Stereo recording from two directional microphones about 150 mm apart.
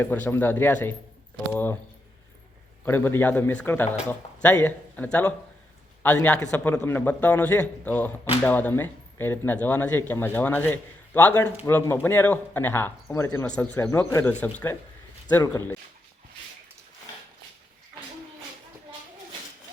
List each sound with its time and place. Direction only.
0.0 s a man's voice: 10° left (ahead or behind)
2.8 s a man's voice: 15° left (ahead or behind)